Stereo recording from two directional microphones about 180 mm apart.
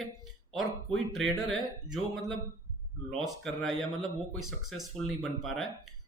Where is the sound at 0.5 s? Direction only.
Centre (ahead or behind).